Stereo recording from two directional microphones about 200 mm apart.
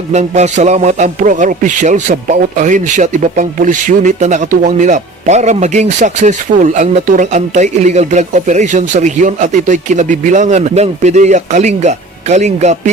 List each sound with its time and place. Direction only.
0.1 s a man's voice: 35° right (ahead or behind)